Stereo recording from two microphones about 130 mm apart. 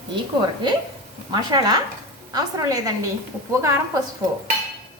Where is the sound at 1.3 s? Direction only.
35° right (ahead or behind).